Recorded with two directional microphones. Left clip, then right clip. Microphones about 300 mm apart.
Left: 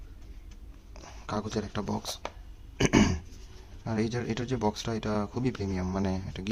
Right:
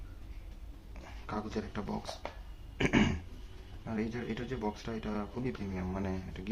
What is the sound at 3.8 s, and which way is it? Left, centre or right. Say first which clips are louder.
Speech: left 6 dB; left.